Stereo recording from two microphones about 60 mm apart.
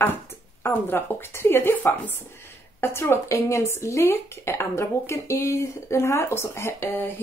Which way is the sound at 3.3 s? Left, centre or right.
Left.